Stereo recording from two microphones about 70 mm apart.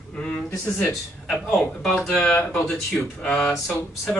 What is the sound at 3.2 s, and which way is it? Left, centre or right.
Speech, left.